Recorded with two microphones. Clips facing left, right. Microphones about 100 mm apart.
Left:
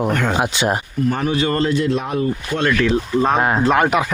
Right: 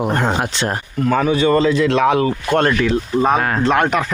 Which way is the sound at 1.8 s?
90° right.